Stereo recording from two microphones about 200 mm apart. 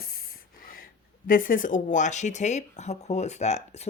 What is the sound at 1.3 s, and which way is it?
Speech, 45° left (ahead or behind).